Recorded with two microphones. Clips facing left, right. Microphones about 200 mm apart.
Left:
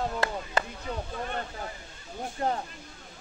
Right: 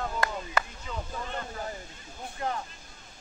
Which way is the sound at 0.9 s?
60° left (ahead or behind).